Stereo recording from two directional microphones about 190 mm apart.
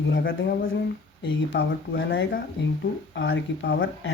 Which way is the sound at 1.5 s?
75° left (ahead or behind).